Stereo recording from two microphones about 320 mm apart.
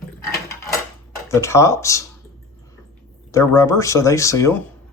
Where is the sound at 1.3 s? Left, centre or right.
Centre.